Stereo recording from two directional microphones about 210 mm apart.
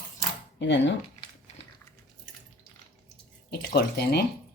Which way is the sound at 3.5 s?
50° left (ahead or behind).